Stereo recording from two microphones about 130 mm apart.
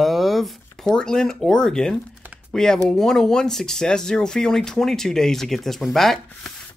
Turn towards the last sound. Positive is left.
turn(degrees=0)  # may be behind; listen again after turning